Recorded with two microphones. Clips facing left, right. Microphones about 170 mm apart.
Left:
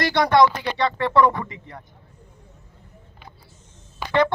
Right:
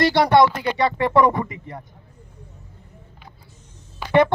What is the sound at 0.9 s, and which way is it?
Speech, 20° right (ahead or behind).